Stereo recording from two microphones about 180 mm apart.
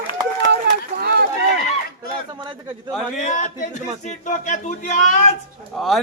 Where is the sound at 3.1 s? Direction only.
40° left (ahead or behind).